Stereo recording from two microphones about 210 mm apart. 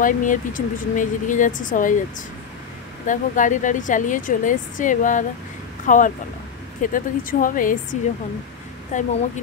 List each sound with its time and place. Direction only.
0.0 s a woman's voice: 40° left (ahead or behind)
3.1 s a woman's voice: 35° left (ahead or behind)